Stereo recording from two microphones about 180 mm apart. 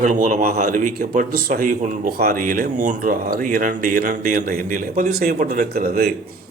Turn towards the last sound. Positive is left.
turn(degrees=-55)  # may be behind; listen again after turning